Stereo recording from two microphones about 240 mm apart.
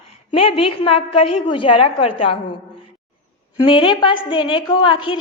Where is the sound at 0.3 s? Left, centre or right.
Left.